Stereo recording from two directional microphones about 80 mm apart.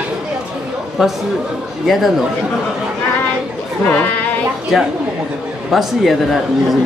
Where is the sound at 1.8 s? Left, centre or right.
Centre.